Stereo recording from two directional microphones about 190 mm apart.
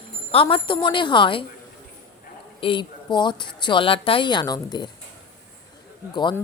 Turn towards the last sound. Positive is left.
turn(degrees=25)  # may be behind; listen again after turning